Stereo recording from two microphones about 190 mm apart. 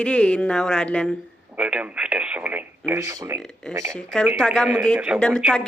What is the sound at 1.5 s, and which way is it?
Speech, 5° right (ahead or behind).